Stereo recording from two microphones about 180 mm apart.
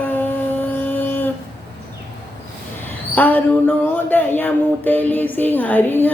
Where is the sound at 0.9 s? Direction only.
10° left (ahead or behind).